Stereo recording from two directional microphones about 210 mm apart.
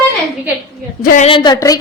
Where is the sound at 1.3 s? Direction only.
20° left (ahead or behind).